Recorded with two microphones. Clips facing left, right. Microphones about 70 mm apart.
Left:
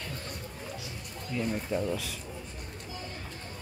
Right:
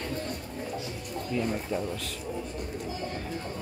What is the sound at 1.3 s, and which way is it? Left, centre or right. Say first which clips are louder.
Speech: right 2 dB; centre.